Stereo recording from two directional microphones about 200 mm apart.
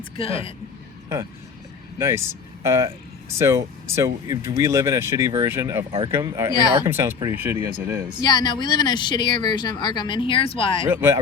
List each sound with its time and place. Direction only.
0.2 s speech: 25° left (ahead or behind)
2.0 s speech: 15° right (ahead or behind)
8.2 s speech: 20° left (ahead or behind)
10.8 s speech: 10° right (ahead or behind)